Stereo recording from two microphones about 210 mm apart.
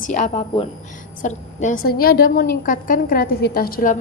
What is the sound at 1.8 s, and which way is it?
A woman's voice, 45° left (ahead or behind).